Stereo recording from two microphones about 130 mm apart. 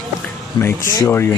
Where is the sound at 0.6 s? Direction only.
20° left (ahead or behind).